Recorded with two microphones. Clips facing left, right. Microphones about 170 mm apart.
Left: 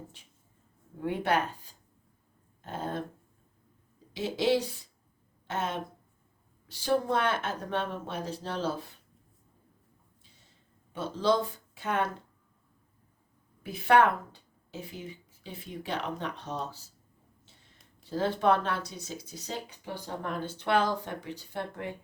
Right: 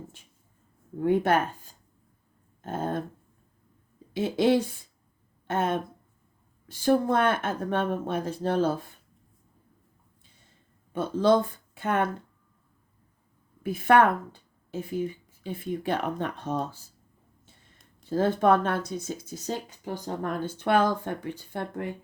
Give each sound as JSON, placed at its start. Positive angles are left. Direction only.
{"t": 1.0, "sound": "speech", "side_deg": -45}
{"t": 4.1, "sound": "speech", "side_deg": -55}
{"t": 10.9, "sound": "speech", "side_deg": -50}
{"t": 13.6, "sound": "speech", "side_deg": -50}
{"t": 18.1, "sound": "speech", "side_deg": -50}